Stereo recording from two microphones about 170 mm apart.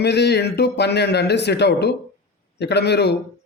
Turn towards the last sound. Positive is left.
turn(degrees=80)